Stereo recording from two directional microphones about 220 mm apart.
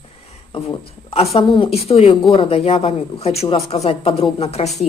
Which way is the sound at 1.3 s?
25° left (ahead or behind).